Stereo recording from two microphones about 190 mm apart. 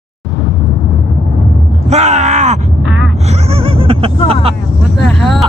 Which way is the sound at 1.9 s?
35° right (ahead or behind).